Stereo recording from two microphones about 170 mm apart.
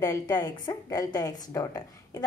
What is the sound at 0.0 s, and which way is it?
A woman's voice, 20° left (ahead or behind).